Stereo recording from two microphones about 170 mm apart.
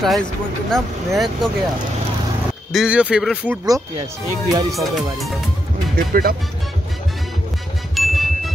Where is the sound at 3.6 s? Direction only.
20° right (ahead or behind).